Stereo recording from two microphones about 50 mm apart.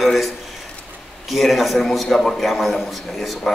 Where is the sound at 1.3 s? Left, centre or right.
Centre.